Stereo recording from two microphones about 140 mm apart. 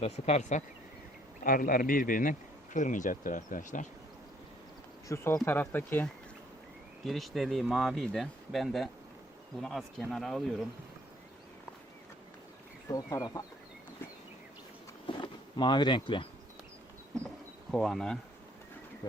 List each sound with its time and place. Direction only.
0.0 s speech: 50° left (ahead or behind)
1.5 s speech: 85° left
2.7 s speech: 65° left (ahead or behind)
5.0 s speech: 20° left (ahead or behind)
7.0 s speech: centre (ahead or behind)
12.9 s speech: 25° left (ahead or behind)
15.0 s a sound: 35° left (ahead or behind)
17.7 s speech: centre (ahead or behind)